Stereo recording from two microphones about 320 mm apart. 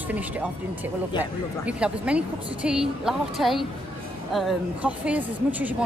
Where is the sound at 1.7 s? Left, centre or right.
Centre.